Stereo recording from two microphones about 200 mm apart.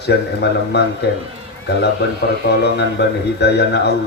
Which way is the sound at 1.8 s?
55° left (ahead or behind).